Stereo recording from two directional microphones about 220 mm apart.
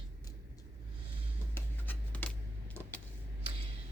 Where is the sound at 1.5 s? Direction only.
10° left (ahead or behind).